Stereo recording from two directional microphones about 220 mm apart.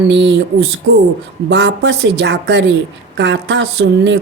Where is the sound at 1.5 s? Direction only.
50° right (ahead or behind).